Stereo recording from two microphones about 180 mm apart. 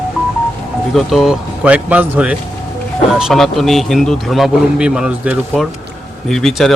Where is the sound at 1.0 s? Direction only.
Centre (ahead or behind).